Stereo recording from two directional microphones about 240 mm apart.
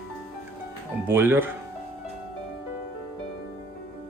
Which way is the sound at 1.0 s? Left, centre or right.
Centre.